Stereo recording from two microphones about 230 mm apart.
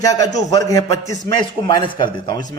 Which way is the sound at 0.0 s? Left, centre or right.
Centre.